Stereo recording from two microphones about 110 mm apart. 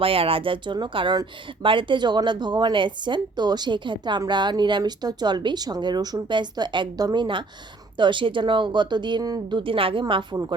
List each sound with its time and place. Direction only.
0.0 s speech: 60° right (ahead or behind)